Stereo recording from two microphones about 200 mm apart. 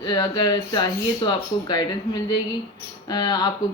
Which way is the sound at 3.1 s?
20° left (ahead or behind).